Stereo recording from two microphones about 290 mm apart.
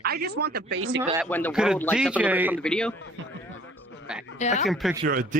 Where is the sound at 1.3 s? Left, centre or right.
Centre.